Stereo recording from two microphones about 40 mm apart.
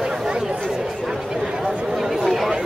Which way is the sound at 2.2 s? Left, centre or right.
Centre.